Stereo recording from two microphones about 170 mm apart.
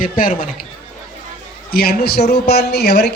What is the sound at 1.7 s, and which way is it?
Speech, 65° left (ahead or behind).